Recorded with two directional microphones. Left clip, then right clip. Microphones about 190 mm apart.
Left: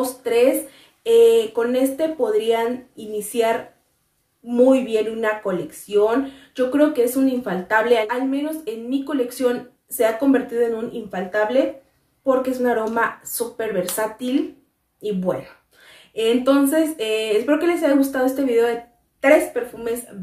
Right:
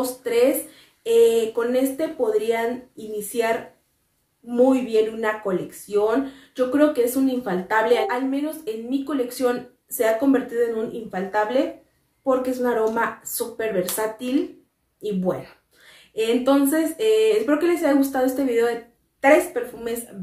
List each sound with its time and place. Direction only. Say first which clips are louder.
0.0 s speech: left 2 dB; 15° left (ahead or behind)
4.8 s speech: even; 10° left (ahead or behind)